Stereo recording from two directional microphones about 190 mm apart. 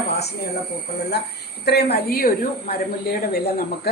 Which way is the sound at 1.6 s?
60° left (ahead or behind).